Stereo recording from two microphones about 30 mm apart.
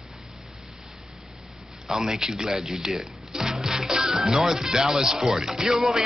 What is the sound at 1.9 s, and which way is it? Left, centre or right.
Speech, right.